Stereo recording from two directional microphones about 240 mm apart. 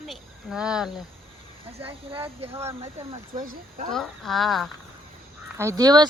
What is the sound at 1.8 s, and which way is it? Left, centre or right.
Speech, right.